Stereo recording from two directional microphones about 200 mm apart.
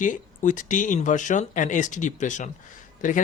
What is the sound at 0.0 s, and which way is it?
Speech, 40° left (ahead or behind).